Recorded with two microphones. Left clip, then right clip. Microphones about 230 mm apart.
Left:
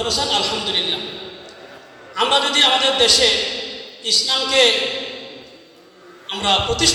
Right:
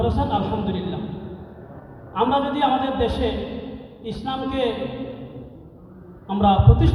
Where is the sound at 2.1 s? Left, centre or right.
Centre.